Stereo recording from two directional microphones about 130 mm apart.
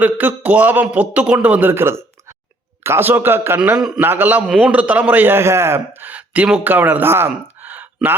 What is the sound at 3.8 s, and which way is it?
A man's voice, 5° right (ahead or behind).